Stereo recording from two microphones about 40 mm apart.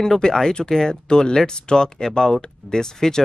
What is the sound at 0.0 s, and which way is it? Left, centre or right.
Speech, centre.